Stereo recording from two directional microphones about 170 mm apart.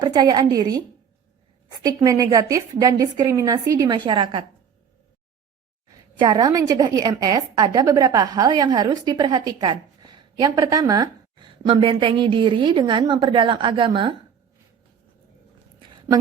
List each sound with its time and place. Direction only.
0.0 s a woman's voice: 25° right (ahead or behind)
6.1 s a woman's voice: 25° right (ahead or behind)